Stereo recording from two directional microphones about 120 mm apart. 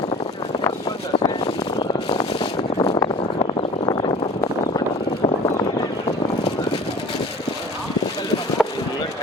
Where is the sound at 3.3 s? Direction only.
45° left (ahead or behind).